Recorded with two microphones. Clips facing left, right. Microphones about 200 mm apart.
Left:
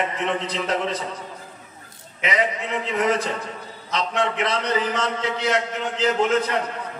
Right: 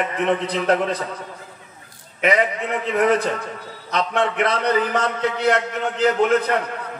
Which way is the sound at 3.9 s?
55° right (ahead or behind).